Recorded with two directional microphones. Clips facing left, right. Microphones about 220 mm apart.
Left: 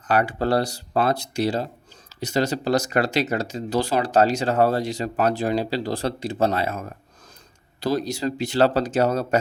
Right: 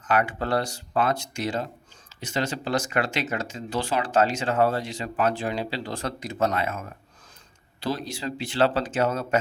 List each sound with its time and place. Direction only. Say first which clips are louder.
0.1 s speech: left 4 dB; 35° left (ahead or behind)